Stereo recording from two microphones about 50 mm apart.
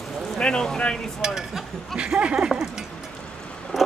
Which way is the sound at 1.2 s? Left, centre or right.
Centre.